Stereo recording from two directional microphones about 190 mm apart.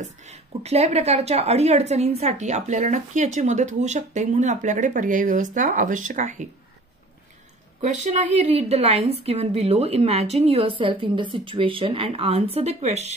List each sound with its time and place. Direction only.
0.2 s a woman's voice: 35° right (ahead or behind)
7.8 s a woman's voice: 35° right (ahead or behind)